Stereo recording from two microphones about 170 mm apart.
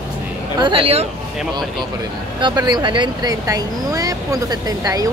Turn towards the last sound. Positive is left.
turn(degrees=-20)  # may be behind; listen again after turning